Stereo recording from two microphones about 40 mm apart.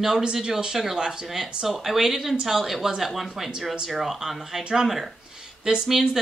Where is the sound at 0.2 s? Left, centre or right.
Centre.